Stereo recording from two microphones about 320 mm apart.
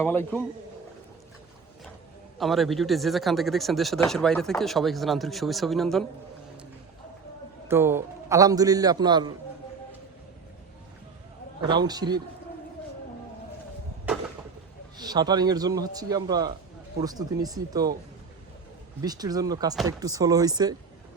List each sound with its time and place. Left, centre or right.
2.4 s a man's voice: centre
7.7 s a man's voice: centre
11.6 s a man's voice: centre
14.9 s a man's voice: centre
19.0 s a man's voice: centre